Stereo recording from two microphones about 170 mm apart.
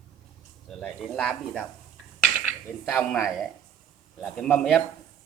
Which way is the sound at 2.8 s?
5° left (ahead or behind).